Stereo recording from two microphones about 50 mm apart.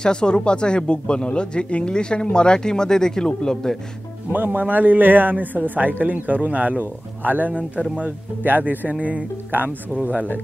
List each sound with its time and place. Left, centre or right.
0.0 s speech: centre
4.3 s a man's voice: right